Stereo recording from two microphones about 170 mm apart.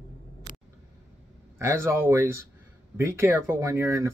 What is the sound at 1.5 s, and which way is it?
Speech, 15° right (ahead or behind).